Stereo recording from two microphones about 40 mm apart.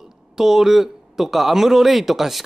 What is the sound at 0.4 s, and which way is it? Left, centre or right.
Speech, centre.